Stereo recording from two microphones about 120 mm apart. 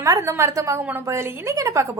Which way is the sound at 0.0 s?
25° right (ahead or behind).